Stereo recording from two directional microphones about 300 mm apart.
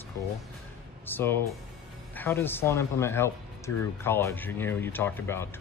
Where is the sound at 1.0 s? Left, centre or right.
Centre.